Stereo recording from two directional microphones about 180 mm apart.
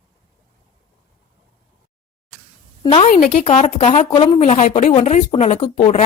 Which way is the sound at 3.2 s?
50° left (ahead or behind).